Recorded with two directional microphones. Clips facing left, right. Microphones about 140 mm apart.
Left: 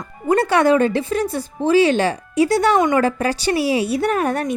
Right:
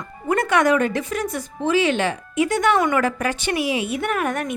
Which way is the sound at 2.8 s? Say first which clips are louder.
Left 3 dB; 25° left (ahead or behind).